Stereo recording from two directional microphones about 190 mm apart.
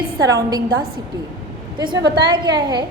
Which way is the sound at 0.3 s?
20° right (ahead or behind).